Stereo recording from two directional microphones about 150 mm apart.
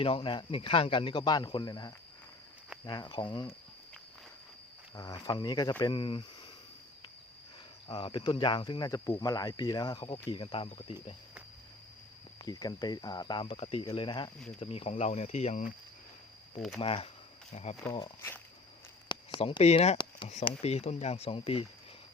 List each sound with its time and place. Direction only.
0.0 s speech: 35° left (ahead or behind)
4.9 s speech: 25° left (ahead or behind)
7.9 s speech: 35° left (ahead or behind)
12.5 s speech: 25° left (ahead or behind); by 15.7 s 50° left (ahead or behind)
16.6 s speech: centre (ahead or behind)
16.8 s speech: 40° left (ahead or behind)
19.4 s speech: 40° left (ahead or behind)